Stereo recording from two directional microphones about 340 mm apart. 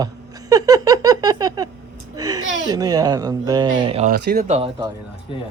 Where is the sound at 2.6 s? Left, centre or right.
Centre.